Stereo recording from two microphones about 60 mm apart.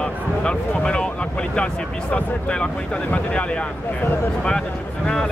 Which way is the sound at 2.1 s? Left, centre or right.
Centre.